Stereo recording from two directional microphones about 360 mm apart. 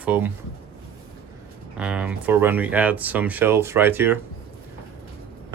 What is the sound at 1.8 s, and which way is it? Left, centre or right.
Speech, centre.